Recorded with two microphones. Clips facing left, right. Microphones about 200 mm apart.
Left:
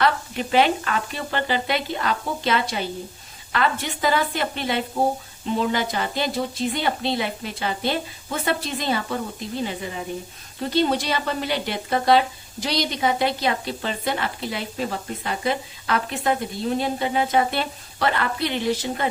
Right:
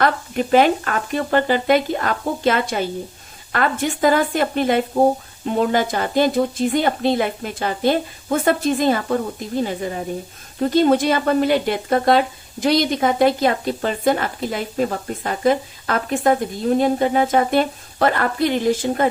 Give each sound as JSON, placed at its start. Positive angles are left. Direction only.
{"t": 0.0, "sound": "speech", "side_deg": -45}